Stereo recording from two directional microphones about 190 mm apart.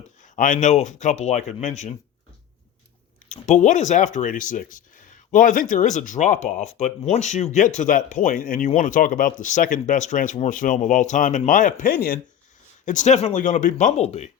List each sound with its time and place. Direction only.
0.3 s speech: 40° left (ahead or behind)
3.4 s speech: 40° left (ahead or behind)